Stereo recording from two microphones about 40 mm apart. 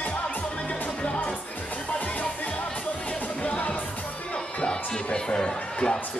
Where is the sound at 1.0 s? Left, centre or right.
Left.